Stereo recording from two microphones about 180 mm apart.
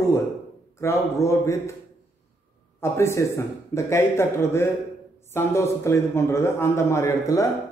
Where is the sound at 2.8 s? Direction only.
15° left (ahead or behind).